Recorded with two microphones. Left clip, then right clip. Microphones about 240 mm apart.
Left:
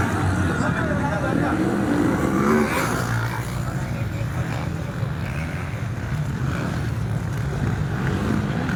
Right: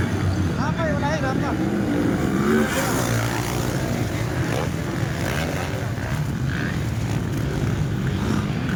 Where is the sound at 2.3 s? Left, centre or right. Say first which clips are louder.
Left 1 dB; centre.